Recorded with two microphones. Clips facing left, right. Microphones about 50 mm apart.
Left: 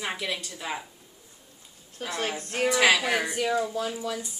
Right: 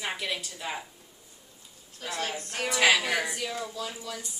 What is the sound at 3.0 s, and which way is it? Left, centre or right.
A woman's voice, left.